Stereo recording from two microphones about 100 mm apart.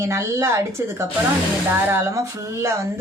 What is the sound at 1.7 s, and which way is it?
Speech, 25° right (ahead or behind).